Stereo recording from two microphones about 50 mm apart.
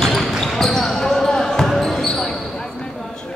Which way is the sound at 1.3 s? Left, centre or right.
Centre.